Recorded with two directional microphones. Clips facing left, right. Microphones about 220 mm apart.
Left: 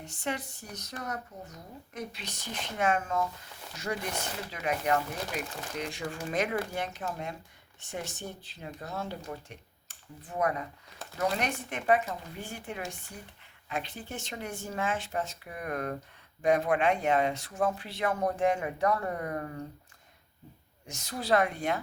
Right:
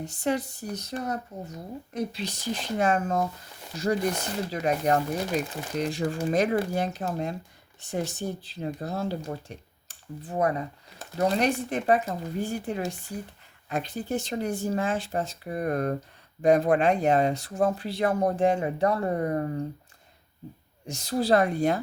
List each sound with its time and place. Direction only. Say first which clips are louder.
0.0 s speech: right 8 dB; 35° right (ahead or behind)
20.8 s speech: right 9 dB; 35° right (ahead or behind)